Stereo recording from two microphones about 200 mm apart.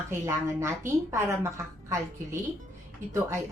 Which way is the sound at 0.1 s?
15° right (ahead or behind).